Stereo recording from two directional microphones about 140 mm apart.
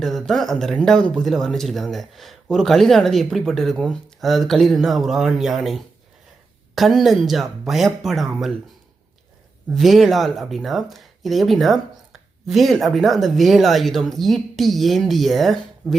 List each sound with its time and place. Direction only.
0.0 s speech: centre (ahead or behind)
9.6 s speech: centre (ahead or behind)